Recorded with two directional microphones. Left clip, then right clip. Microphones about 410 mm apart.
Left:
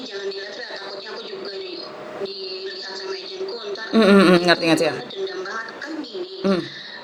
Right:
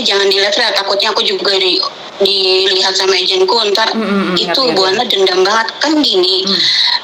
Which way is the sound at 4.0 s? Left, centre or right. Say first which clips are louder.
Left 1 dB; left.